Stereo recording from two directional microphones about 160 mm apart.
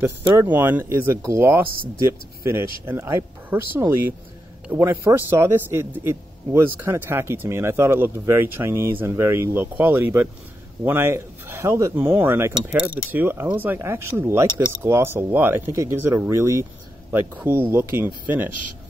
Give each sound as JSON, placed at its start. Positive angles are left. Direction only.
{"t": 0.0, "sound": "speech", "side_deg": -15}